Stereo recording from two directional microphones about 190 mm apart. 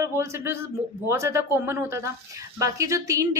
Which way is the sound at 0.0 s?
15° right (ahead or behind).